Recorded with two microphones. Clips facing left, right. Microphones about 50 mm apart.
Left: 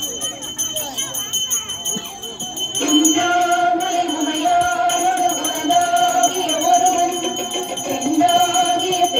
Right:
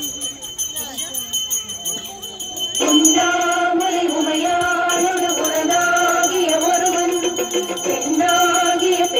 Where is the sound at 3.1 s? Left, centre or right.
Right.